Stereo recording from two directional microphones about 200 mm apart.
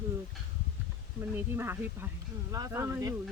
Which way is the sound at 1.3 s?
10° right (ahead or behind).